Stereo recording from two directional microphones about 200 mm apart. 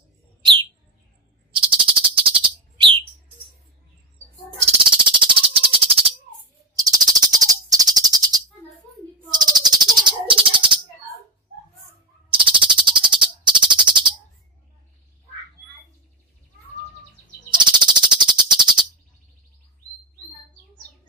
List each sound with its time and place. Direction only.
1.5 s frog: 25° right (ahead or behind)
4.6 s bird: 25° right (ahead or behind)
12.3 s bird: 25° right (ahead or behind)
17.5 s bird: 25° right (ahead or behind)